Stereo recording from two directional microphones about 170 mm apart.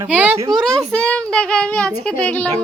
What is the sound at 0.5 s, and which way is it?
A child's voice, centre (ahead or behind).